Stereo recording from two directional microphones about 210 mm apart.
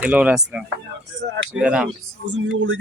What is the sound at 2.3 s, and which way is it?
Speech, 60° right (ahead or behind).